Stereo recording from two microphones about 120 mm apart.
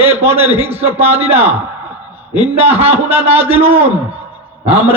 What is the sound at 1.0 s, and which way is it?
A man's voice, 55° right (ahead or behind).